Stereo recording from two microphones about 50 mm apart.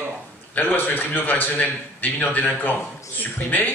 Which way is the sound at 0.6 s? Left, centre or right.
Left.